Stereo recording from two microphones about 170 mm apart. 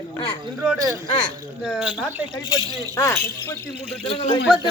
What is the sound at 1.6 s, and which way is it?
Speech, 5° right (ahead or behind).